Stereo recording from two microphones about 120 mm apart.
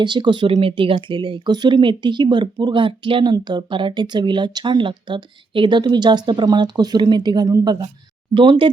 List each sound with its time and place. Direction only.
0.0 s speech: 40° right (ahead or behind)